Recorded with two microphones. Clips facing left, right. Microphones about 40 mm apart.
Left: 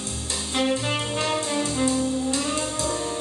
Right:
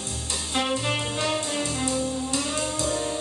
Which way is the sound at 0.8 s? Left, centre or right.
Left.